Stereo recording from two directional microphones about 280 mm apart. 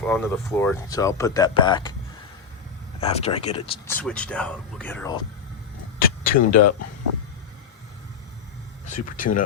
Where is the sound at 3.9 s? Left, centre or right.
Centre.